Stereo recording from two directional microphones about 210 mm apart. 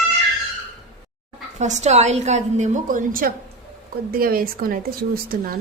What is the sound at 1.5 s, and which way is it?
A woman's voice, 35° right (ahead or behind).